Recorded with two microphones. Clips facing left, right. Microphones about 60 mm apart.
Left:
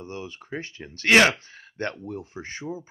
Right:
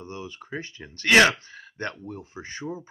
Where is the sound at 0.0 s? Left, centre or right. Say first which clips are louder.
Left 1 dB; left.